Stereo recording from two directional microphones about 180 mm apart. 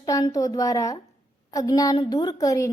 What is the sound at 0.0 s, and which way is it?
A woman's voice, 20° left (ahead or behind).